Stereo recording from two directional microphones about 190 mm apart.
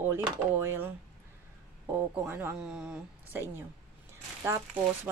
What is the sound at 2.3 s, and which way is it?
Speech, 10° right (ahead or behind).